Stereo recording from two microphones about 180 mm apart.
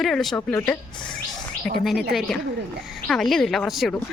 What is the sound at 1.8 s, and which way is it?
A woman's voice, centre (ahead or behind).